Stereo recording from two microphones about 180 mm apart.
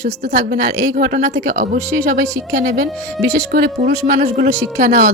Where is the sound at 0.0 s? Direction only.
55° right (ahead or behind).